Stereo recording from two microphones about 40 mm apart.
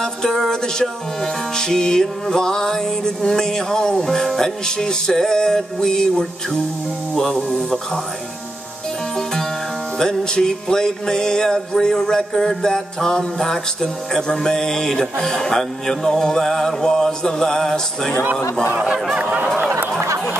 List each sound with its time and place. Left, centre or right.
0.0 s music: centre
9.9 s music: centre
18.2 s speech: right
19.1 s a sound: right